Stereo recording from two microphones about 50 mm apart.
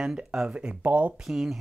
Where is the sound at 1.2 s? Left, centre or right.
Centre.